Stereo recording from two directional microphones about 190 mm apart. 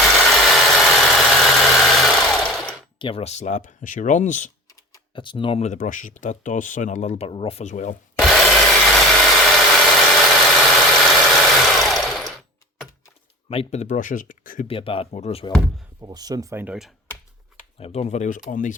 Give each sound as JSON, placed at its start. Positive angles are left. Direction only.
{"t": 0.0, "sound": "engine", "side_deg": 0}
{"t": 3.0, "sound": "speech", "side_deg": 30}
{"t": 4.7, "sound": "speech", "side_deg": 25}
{"t": 8.2, "sound": "wood", "side_deg": 0}
{"t": 13.5, "sound": "speech", "side_deg": 35}
{"t": 14.7, "sound": "speech", "side_deg": 30}
{"t": 16.0, "sound": "speech", "side_deg": -20}
{"t": 17.7, "sound": "speech", "side_deg": 35}